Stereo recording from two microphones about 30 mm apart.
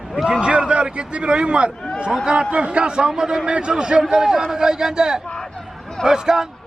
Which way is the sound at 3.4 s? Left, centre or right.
Right.